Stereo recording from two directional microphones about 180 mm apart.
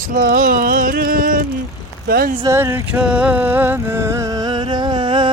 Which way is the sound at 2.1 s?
55° right (ahead or behind).